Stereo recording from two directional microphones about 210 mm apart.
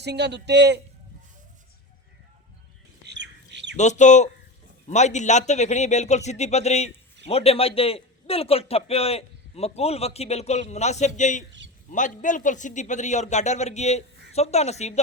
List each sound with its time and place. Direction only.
0.0 s a man's voice: 55° right (ahead or behind)
3.1 s squawk: 55° right (ahead or behind)
3.8 s a man's voice: 35° left (ahead or behind)